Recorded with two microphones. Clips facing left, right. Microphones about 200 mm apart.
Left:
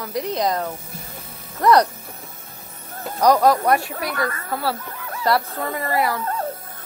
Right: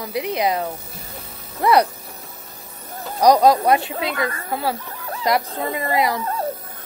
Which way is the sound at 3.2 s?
15° right (ahead or behind).